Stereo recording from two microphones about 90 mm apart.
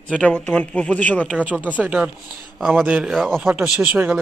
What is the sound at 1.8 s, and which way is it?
Speech, 15° right (ahead or behind).